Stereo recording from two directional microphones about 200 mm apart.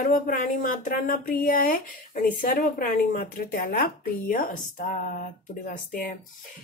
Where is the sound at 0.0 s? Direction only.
45° left (ahead or behind).